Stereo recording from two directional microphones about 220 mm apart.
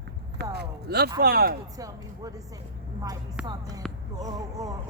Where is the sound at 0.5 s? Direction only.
45° right (ahead or behind).